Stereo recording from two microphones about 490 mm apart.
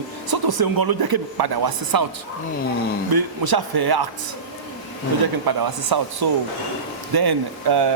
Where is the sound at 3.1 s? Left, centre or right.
Right.